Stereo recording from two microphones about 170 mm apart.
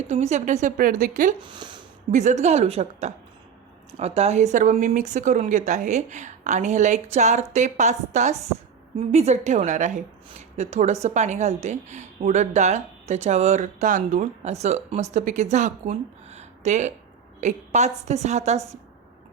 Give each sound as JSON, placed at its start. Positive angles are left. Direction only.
{"t": 0.1, "sound": "a woman's voice", "side_deg": -45}
{"t": 1.4, "sound": "speech", "side_deg": -25}
{"t": 2.0, "sound": "a woman's voice", "side_deg": -45}